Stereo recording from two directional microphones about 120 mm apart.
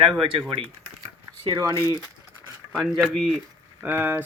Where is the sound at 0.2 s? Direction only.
50° right (ahead or behind).